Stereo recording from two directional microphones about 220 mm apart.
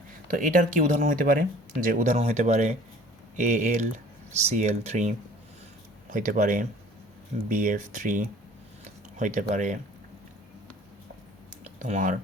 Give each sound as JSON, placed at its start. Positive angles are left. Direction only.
{"t": 0.3, "sound": "speech", "side_deg": -35}
{"t": 11.8, "sound": "speech", "side_deg": -35}